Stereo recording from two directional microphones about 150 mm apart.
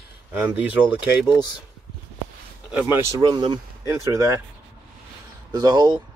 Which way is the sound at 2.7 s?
10° right (ahead or behind).